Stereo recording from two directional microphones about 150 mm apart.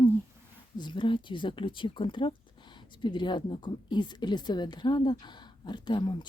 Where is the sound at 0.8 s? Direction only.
30° left (ahead or behind).